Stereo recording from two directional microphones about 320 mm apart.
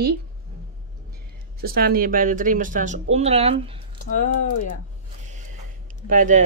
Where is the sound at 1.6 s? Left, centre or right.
Right.